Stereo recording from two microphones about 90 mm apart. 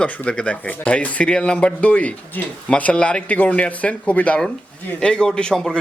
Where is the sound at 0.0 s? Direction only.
10° left (ahead or behind).